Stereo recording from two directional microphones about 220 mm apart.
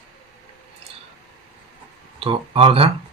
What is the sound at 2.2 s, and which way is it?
Speech, 25° right (ahead or behind).